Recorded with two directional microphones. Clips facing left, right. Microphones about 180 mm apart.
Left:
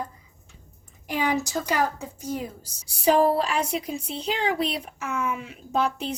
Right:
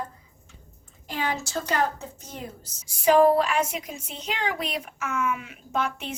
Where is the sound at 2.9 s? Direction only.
35° left (ahead or behind).